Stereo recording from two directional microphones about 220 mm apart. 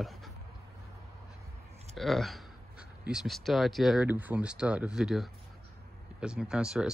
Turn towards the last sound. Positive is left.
turn(degrees=-5)  # may be behind; listen again after turning